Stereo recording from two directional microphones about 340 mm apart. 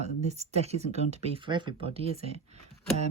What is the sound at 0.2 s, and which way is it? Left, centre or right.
Speech, centre.